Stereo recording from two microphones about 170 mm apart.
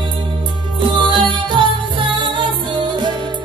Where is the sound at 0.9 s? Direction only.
30° right (ahead or behind).